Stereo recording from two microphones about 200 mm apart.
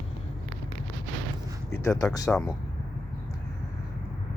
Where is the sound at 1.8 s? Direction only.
15° left (ahead or behind).